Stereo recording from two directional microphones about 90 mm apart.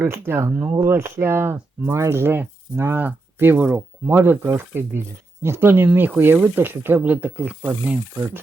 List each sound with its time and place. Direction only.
0.0 s speech: 30° right (ahead or behind)